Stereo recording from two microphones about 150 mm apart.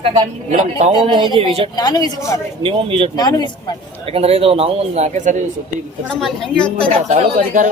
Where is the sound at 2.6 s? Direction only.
40° right (ahead or behind).